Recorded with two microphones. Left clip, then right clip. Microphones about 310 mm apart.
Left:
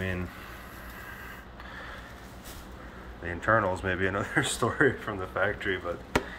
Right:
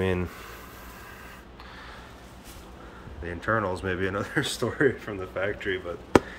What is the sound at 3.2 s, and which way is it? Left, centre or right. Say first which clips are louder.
Speech: left 2 dB; centre.